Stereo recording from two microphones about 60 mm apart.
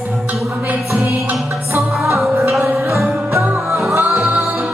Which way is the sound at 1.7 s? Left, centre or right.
Right.